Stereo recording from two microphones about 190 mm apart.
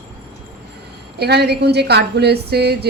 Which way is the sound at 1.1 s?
60° right (ahead or behind).